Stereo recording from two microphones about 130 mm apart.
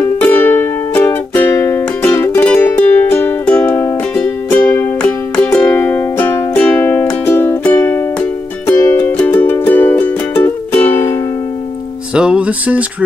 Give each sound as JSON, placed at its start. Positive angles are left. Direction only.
{"t": 0.0, "sound": "music", "side_deg": 10}
{"t": 12.1, "sound": "music", "side_deg": -10}